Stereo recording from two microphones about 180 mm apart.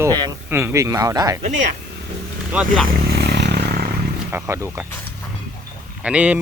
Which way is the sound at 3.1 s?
70° right (ahead or behind).